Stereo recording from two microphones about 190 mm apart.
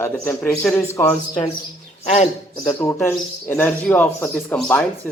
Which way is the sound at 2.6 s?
15° left (ahead or behind).